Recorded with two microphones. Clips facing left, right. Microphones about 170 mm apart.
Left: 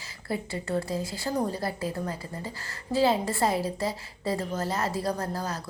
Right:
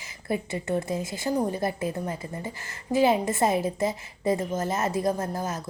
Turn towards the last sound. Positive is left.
turn(degrees=-20)  # may be behind; listen again after turning